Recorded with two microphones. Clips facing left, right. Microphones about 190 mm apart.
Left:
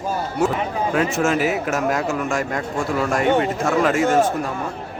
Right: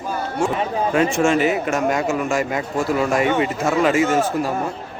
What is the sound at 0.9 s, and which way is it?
Speech, 5° left (ahead or behind).